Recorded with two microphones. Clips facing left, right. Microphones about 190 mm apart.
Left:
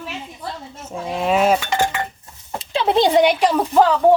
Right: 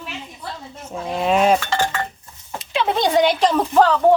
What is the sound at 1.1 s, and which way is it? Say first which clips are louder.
Cutlery: even; centre (ahead or behind).